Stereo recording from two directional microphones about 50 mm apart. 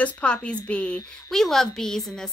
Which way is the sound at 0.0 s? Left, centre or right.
Left.